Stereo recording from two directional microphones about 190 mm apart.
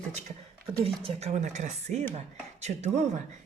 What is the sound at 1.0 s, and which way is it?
A woman's voice, 35° right (ahead or behind).